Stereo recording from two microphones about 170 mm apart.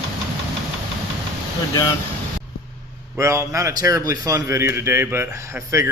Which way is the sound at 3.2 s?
15° right (ahead or behind).